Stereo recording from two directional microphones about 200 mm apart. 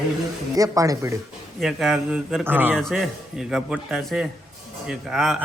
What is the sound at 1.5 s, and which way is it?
A man's voice, centre (ahead or behind).